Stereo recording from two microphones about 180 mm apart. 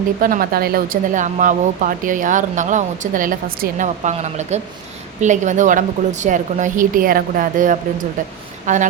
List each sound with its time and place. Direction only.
0.2 s speech: 50° right (ahead or behind)